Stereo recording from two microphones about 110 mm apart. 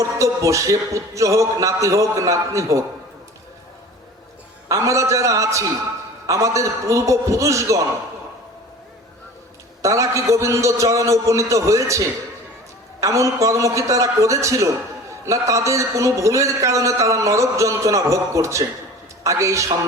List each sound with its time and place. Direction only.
0.0 s a man's voice: 30° right (ahead or behind)
4.7 s a man's voice: 30° right (ahead or behind)
9.8 s a man's voice: 30° right (ahead or behind)